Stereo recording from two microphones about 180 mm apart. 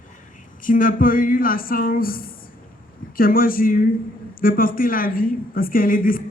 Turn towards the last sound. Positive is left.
turn(degrees=50)  # may be behind; listen again after turning